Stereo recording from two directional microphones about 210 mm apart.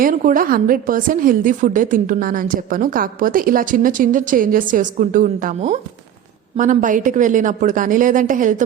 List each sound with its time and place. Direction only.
0.0 s a woman's voice: 40° right (ahead or behind)